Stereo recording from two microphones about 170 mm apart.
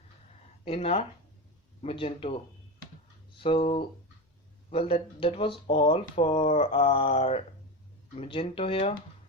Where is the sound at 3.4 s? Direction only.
35° left (ahead or behind).